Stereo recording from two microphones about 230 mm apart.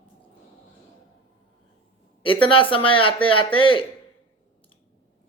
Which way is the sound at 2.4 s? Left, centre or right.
Left.